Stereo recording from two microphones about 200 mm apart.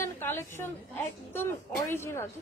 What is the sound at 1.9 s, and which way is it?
Speech, 15° left (ahead or behind).